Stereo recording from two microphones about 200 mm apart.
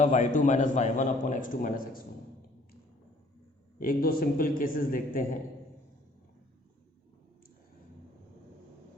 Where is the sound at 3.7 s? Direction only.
45° left (ahead or behind).